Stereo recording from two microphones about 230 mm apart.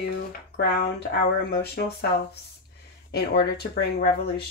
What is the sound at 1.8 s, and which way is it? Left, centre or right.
Speech, left.